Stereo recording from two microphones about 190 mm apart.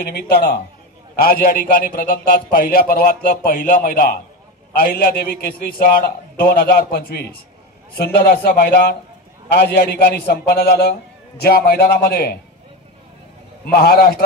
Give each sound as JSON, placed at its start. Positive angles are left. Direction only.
{"t": 0.0, "sound": "a man's voice", "side_deg": 55}
{"t": 13.7, "sound": "a man's voice", "side_deg": 50}